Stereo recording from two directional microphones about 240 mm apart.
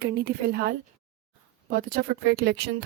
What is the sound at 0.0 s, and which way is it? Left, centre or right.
Speech, right.